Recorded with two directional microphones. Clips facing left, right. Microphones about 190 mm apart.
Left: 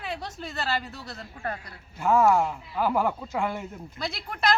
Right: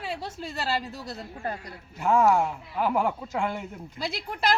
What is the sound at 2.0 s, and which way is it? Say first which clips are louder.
Speech: even; centre (ahead or behind).